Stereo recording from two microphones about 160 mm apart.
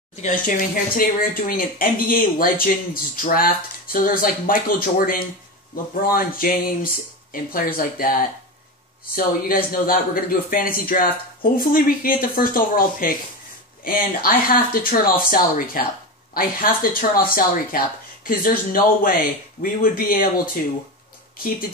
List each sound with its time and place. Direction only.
0.1 s speech: 50° left (ahead or behind)